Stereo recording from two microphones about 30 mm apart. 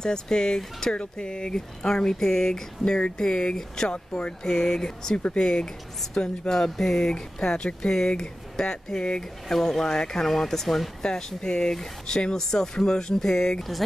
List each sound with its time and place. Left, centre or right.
0.0 s speech: left
0.9 s speech: left
2.0 s speech: centre
2.8 s speech: left; by 7.2 s centre
7.3 s speech: left
12.4 s speech: centre